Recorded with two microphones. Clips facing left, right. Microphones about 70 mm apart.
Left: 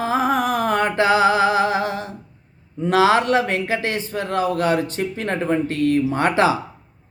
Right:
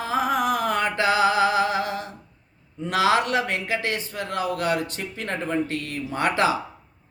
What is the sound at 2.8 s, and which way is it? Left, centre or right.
A man's voice, left.